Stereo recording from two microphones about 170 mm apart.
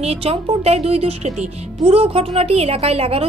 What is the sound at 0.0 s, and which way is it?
A woman's voice, 35° right (ahead or behind).